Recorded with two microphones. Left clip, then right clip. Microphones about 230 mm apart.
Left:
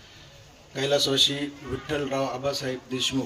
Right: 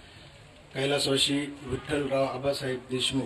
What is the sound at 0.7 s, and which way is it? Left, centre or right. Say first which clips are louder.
A man's voice: left 3 dB; left.